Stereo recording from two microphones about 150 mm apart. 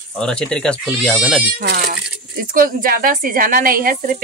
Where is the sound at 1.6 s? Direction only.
75° right (ahead or behind).